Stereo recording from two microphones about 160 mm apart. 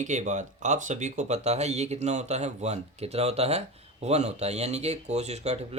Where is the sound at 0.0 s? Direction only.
50° right (ahead or behind).